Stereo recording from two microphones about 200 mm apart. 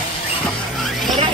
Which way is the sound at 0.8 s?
Centre (ahead or behind).